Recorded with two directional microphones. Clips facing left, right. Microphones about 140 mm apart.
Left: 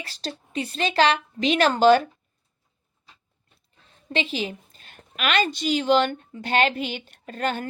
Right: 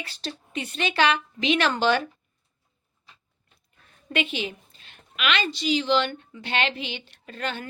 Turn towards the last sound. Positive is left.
turn(degrees=45)  # may be behind; listen again after turning